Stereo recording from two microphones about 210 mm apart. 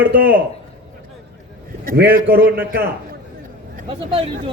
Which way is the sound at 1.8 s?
45° right (ahead or behind).